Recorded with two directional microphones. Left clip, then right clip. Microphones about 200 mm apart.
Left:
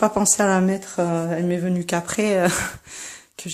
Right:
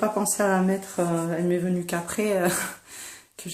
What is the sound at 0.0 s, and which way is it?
Speech, 40° left (ahead or behind).